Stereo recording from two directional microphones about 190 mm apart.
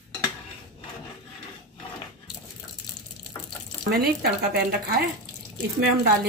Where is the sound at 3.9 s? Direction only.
55° right (ahead or behind).